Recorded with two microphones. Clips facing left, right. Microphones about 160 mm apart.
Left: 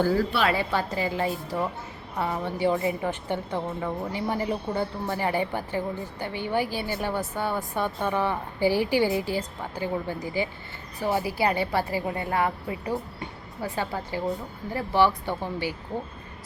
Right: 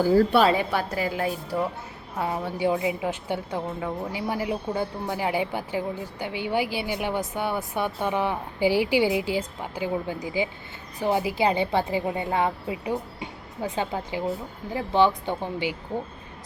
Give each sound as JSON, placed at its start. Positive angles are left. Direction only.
{"t": 0.5, "sound": "a woman's voice", "side_deg": -15}